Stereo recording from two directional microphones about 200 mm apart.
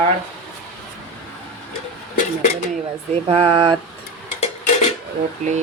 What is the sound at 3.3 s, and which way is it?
Speech, 25° right (ahead or behind).